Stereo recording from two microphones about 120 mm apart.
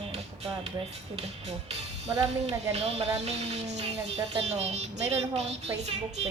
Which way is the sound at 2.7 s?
60° right (ahead or behind).